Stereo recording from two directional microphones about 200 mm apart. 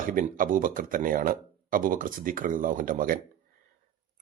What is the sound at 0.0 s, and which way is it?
Speech, 45° right (ahead or behind).